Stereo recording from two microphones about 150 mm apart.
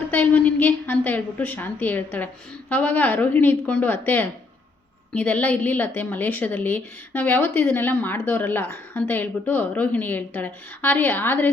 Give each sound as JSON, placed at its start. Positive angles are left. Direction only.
{"t": 0.1, "sound": "a woman's voice", "side_deg": 10}